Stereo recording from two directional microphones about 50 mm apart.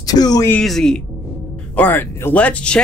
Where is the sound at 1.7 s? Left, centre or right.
Left.